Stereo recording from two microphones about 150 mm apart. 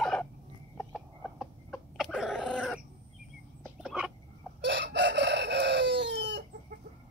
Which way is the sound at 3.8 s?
5° right (ahead or behind).